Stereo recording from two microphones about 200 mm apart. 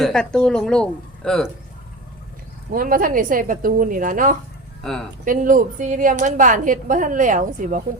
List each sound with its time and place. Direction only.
0.0 s speech: 5° left (ahead or behind)
2.7 s a woman's voice: 45° right (ahead or behind)
4.8 s speech: centre (ahead or behind)
5.2 s a woman's voice: 40° right (ahead or behind)